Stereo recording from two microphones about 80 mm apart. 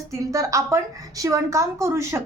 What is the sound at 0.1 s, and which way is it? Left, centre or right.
A woman's voice, right.